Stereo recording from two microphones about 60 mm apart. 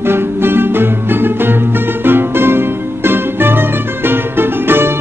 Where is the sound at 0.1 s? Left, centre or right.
Right.